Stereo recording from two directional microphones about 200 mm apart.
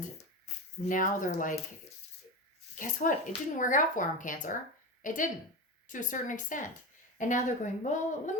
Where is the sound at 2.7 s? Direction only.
40° left (ahead or behind).